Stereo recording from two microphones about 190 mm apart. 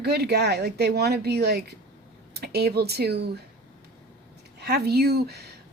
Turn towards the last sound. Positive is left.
turn(degrees=-55)  # may be behind; listen again after turning